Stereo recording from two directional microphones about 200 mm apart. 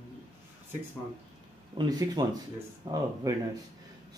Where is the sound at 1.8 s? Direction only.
20° right (ahead or behind).